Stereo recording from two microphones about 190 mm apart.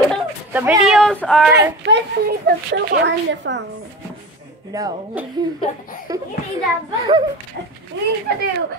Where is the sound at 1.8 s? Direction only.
60° right (ahead or behind).